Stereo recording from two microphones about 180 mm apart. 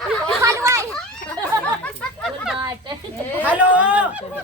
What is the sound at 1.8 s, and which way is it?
Chatter, centre (ahead or behind).